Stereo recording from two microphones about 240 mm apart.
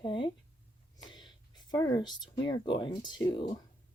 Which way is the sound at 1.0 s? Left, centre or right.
Centre.